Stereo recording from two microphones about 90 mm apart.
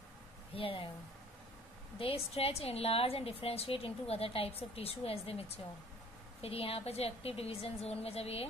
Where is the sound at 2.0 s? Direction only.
90° left.